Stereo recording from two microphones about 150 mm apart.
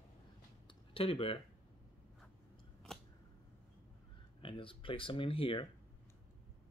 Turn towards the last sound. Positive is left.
turn(degrees=35)  # may be behind; listen again after turning